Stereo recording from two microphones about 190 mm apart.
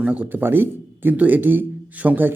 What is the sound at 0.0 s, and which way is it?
A man's voice, 5° right (ahead or behind).